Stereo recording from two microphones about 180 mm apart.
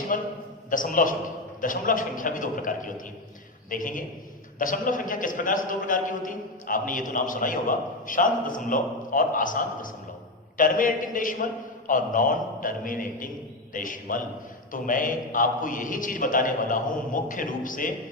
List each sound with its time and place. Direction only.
0.1 s a man's voice: 50° left (ahead or behind)